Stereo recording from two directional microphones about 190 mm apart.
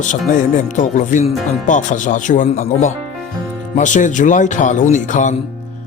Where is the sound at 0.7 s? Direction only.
40° left (ahead or behind).